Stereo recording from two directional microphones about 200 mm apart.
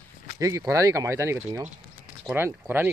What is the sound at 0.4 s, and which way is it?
Speech, 15° right (ahead or behind).